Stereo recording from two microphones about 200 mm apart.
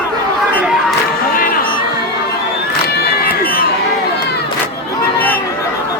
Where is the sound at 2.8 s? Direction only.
50° left (ahead or behind).